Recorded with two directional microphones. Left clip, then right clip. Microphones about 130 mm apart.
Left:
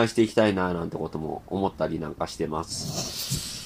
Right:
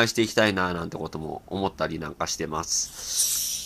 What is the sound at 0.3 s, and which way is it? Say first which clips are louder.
Speech: even; 15° right (ahead or behind).